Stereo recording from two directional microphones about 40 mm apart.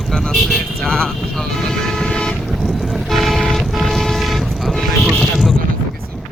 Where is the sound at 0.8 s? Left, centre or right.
Centre.